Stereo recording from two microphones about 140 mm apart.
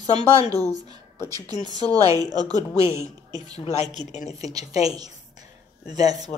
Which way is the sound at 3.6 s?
50° left (ahead or behind).